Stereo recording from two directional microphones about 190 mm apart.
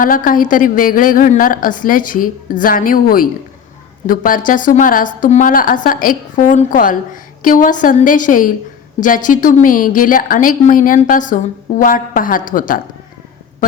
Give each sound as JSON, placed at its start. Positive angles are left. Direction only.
{"t": 0.0, "sound": "a woman's voice", "side_deg": 45}